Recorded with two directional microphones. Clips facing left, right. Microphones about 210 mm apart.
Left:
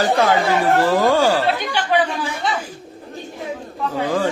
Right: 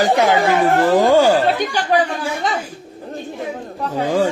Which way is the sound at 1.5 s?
45° right (ahead or behind).